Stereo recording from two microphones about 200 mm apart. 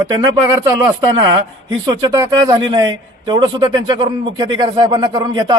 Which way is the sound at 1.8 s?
20° right (ahead or behind).